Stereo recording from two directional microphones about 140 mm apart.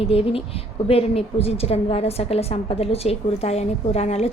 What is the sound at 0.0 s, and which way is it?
A woman's voice, 40° left (ahead or behind).